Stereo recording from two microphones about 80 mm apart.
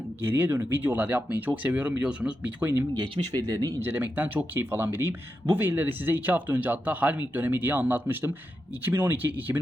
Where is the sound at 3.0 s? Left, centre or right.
Right.